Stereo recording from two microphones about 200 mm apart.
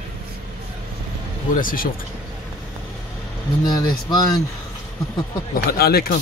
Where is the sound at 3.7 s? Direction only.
20° left (ahead or behind).